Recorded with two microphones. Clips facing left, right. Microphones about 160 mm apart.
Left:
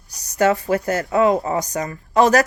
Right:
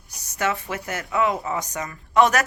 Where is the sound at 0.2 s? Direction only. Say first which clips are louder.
Left 8 dB; 40° left (ahead or behind).